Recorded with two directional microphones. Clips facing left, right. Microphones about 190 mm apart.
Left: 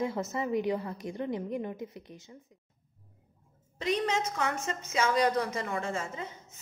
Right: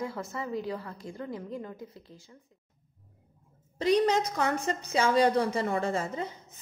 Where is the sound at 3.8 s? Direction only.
35° right (ahead or behind).